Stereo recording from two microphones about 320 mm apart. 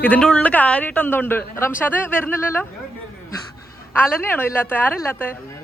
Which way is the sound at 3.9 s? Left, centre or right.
Centre.